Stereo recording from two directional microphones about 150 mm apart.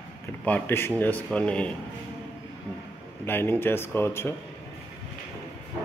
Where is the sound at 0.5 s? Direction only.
10° left (ahead or behind).